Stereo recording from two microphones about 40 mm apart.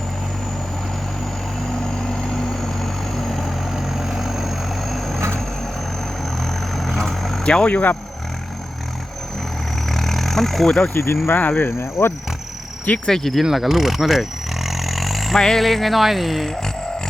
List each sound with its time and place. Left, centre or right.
1.6 s vehicle: centre
6.7 s vehicle: centre
7.4 s speech: centre
9.9 s a sound: centre
10.9 s speech: left
11.3 s speech: left
13.1 s speech: centre
13.4 s a sound: centre
15.4 s speech: centre
15.6 s speech: centre